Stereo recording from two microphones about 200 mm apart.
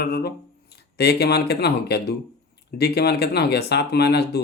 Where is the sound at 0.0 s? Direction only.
55° left (ahead or behind).